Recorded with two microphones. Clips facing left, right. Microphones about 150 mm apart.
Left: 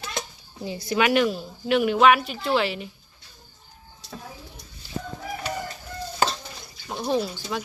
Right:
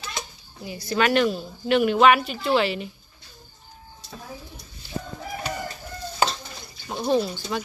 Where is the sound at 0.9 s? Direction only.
10° left (ahead or behind).